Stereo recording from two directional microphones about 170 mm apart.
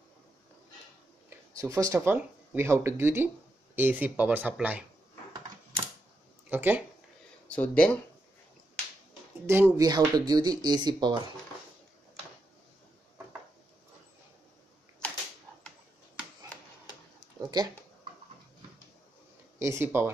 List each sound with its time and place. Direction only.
1.6 s speech: 20° right (ahead or behind)
6.5 s speech: 10° right (ahead or behind)
7.4 s speech: 5° left (ahead or behind)
9.5 s speech: 15° right (ahead or behind)
9.8 s speech: 25° right (ahead or behind)
17.4 s a sound: 25° right (ahead or behind)
19.6 s speech: 15° right (ahead or behind)